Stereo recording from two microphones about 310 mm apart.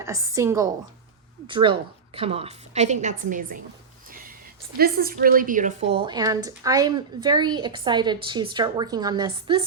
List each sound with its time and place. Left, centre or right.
0.0 s a woman's voice: centre; by 3.6 s right
4.1 s a sound: right
4.8 s a woman's voice: right